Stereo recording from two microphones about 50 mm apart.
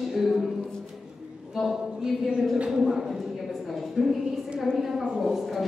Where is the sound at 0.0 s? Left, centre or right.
Centre.